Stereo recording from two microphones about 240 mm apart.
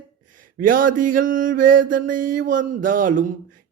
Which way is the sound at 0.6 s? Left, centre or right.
Right.